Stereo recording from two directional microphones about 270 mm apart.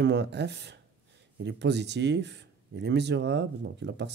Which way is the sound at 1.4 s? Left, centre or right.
Right.